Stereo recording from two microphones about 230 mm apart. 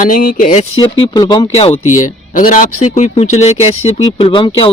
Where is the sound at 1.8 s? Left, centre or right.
Left.